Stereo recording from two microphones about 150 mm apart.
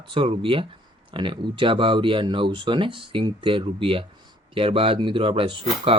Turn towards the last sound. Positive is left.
turn(degrees=-35)  # may be behind; listen again after turning